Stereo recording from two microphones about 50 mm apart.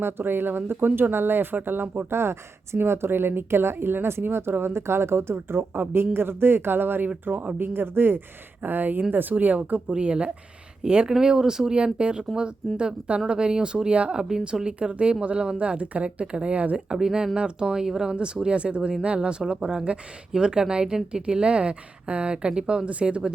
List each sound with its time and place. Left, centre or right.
0.0 s speech: right
17.0 s speech: centre